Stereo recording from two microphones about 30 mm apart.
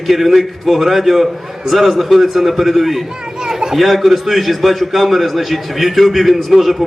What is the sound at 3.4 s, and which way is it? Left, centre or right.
Speech, centre.